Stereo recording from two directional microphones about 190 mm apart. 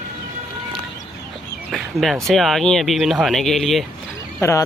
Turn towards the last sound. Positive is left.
turn(degrees=15)  # may be behind; listen again after turning